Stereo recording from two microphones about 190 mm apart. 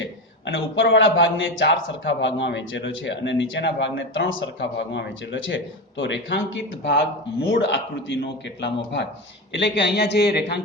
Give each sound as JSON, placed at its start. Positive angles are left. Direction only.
{"t": 0.0, "sound": "a man's voice", "side_deg": 70}